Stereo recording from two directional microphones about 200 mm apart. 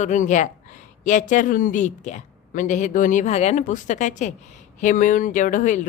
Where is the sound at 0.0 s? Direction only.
40° left (ahead or behind).